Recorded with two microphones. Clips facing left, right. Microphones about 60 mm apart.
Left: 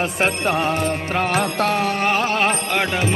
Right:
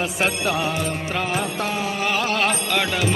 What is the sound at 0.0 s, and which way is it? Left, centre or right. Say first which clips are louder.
Music: left 2 dB; left.